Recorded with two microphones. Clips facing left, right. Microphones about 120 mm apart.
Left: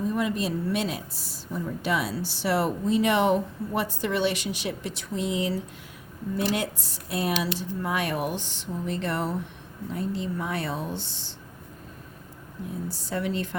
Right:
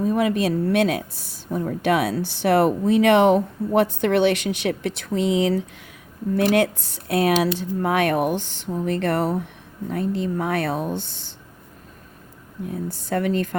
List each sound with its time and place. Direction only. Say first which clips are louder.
0.0 s speech: right 6 dB; 65° right (ahead or behind)
12.9 s speech: right 7 dB; 55° right (ahead or behind)